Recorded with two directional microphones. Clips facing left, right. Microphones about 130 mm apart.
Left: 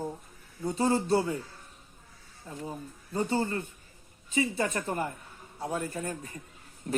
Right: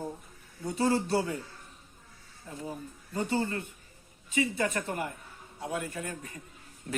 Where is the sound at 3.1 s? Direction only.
30° left (ahead or behind).